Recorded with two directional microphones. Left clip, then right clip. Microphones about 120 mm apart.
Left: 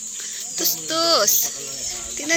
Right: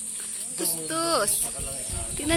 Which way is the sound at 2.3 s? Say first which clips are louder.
Left 4 dB; 20° right (ahead or behind).